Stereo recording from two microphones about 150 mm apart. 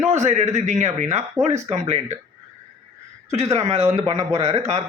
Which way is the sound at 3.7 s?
45° right (ahead or behind).